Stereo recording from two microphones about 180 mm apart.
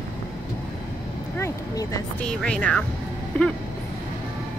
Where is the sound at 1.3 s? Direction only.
15° left (ahead or behind).